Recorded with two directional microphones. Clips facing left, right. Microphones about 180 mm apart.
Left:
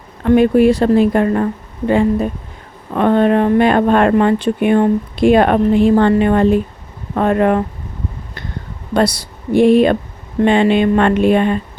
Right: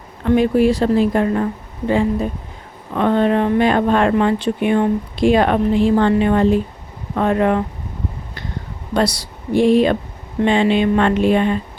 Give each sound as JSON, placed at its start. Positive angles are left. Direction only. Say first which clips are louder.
{"t": 0.3, "sound": "speech", "louder": "left 4 dB", "side_deg": 55}
{"t": 2.9, "sound": "speech", "louder": "left 3 dB", "side_deg": 50}
{"t": 9.0, "sound": "speech", "louder": "left 3 dB", "side_deg": 55}